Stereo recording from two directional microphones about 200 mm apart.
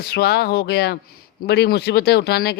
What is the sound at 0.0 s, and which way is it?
Speech, 50° left (ahead or behind).